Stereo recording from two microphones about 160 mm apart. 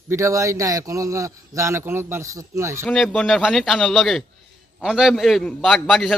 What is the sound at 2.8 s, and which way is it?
A man's voice, centre (ahead or behind).